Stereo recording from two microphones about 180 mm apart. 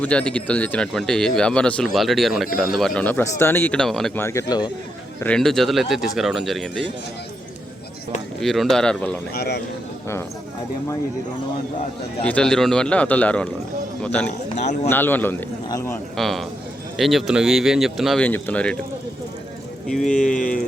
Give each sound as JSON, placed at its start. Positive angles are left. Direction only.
{"t": 0.0, "sound": "speech", "side_deg": 5}
{"t": 5.2, "sound": "speech", "side_deg": 5}
{"t": 8.4, "sound": "speech", "side_deg": 0}
{"t": 9.3, "sound": "a man's voice", "side_deg": 60}
{"t": 12.2, "sound": "speech", "side_deg": 5}
{"t": 16.1, "sound": "speech", "side_deg": 0}
{"t": 19.9, "sound": "speech", "side_deg": 5}